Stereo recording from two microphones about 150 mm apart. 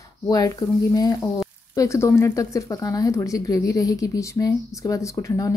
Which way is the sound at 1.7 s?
20° left (ahead or behind).